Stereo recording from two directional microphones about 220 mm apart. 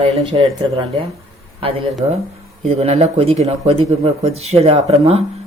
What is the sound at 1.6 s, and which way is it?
Speech, 25° right (ahead or behind).